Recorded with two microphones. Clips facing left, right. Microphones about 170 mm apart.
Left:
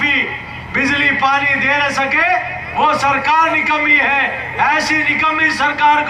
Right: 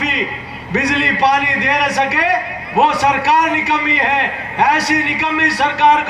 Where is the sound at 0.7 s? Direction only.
65° right (ahead or behind).